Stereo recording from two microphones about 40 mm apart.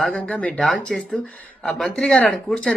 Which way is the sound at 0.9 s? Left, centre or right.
Centre.